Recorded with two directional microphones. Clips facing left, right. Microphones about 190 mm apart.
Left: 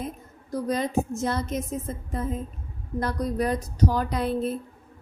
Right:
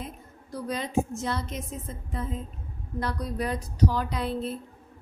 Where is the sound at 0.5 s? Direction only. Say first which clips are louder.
Left 3 dB; 45° left (ahead or behind).